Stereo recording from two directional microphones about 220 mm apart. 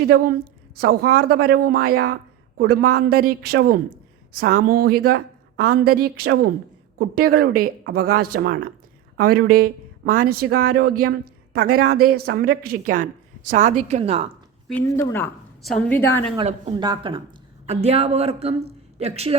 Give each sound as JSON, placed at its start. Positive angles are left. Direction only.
{"t": 0.1, "sound": "a woman's voice", "side_deg": -40}
{"t": 12.0, "sound": "a woman's voice", "side_deg": -45}
{"t": 14.7, "sound": "a woman's voice", "side_deg": 10}
{"t": 16.4, "sound": "a woman's voice", "side_deg": -25}